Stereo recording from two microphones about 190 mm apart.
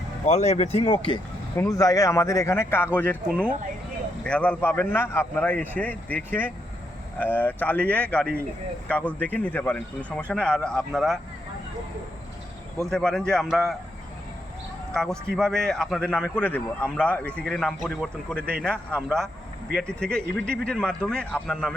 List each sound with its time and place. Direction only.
0.3 s speech: 35° left (ahead or behind)
1.5 s a man's voice: 15° left (ahead or behind); by 11.2 s centre (ahead or behind)
12.9 s a man's voice: 5° left (ahead or behind)
14.9 s a man's voice: 5° left (ahead or behind)